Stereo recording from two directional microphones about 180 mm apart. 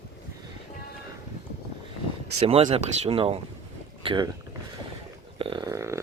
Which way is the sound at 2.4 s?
35° right (ahead or behind).